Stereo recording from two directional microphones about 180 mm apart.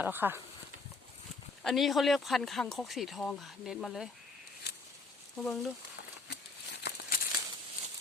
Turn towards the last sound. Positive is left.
turn(degrees=65)  # may be behind; listen again after turning